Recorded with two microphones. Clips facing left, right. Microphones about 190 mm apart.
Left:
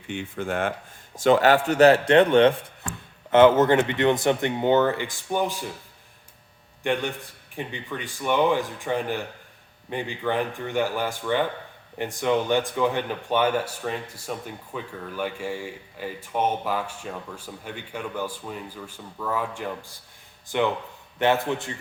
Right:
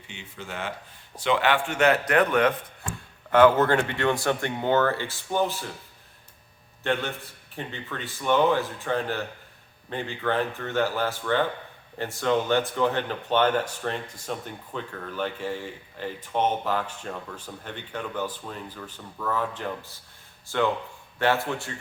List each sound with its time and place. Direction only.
0.1 s a man's voice: 55° left (ahead or behind); by 5.6 s 15° left (ahead or behind)
6.8 s speech: 15° left (ahead or behind)
21.2 s speech: 20° left (ahead or behind)